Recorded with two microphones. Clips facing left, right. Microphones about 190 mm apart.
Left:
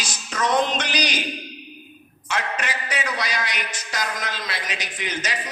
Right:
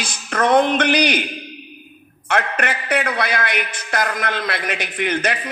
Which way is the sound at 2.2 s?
55° right (ahead or behind).